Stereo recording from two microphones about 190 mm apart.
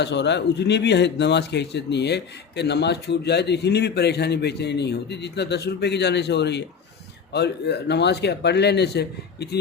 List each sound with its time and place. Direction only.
0.0 s speech: 65° left (ahead or behind)